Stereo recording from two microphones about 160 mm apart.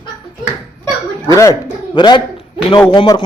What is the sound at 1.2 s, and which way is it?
A man's voice, 20° left (ahead or behind).